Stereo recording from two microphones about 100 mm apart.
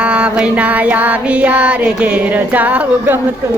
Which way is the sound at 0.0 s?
10° right (ahead or behind).